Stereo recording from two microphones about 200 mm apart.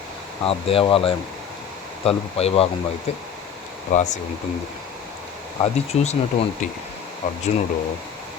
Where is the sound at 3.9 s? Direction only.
35° left (ahead or behind).